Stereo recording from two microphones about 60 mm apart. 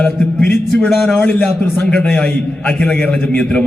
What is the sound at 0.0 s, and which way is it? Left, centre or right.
A man's voice, centre.